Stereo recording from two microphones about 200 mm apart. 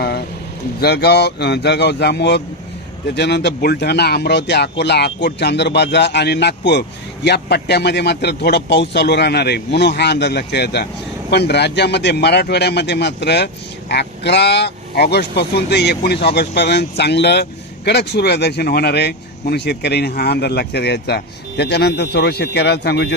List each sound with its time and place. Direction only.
0.8 s a man's voice: 55° left (ahead or behind)